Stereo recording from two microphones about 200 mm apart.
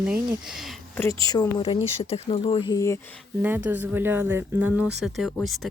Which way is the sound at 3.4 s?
10° right (ahead or behind).